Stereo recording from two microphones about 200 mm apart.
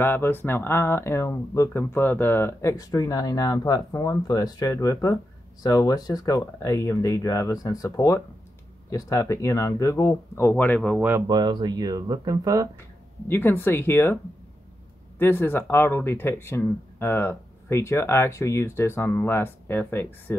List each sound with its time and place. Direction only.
0.0 s speech: 10° left (ahead or behind)
11.1 s speech: 15° right (ahead or behind)
13.3 s speech: 10° left (ahead or behind)
15.1 s speech: 10° left (ahead or behind)